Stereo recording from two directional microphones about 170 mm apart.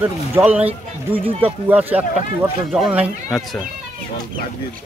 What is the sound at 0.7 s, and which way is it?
Speech, 35° right (ahead or behind).